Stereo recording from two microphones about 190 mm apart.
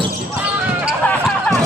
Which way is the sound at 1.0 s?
10° left (ahead or behind).